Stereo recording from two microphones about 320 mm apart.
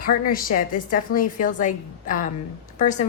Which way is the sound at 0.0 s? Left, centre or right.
Left.